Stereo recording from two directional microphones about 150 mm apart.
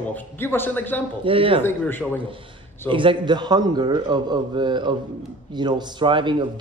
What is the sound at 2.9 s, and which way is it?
Speech, 35° right (ahead or behind).